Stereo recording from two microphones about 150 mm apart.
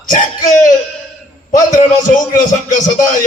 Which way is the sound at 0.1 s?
55° left (ahead or behind).